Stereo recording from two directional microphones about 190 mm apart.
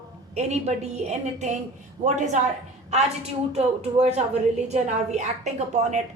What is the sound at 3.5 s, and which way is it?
Female singing, 35° right (ahead or behind).